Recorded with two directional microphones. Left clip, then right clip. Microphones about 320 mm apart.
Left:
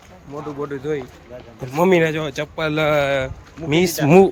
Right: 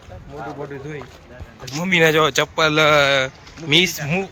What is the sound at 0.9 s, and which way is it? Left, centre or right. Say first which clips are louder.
A man's voice: left 8 dB; centre.